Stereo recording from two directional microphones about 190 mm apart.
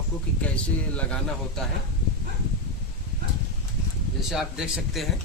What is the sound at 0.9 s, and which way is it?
Speech, 5° left (ahead or behind).